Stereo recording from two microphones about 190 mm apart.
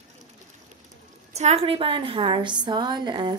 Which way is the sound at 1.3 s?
35° right (ahead or behind).